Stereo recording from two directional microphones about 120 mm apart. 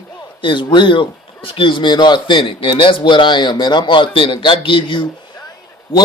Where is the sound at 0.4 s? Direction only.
40° left (ahead or behind).